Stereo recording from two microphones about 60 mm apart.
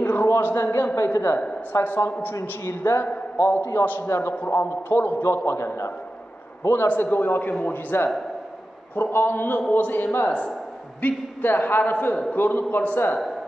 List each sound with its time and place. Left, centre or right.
0.0 s a sound: left
0.9 s a man's voice: left
6.9 s a man's voice: left